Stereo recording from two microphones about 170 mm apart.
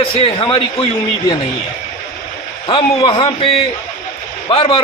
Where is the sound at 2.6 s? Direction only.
25° left (ahead or behind).